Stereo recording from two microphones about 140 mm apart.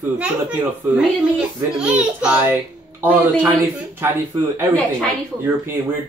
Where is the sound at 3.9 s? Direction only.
15° right (ahead or behind).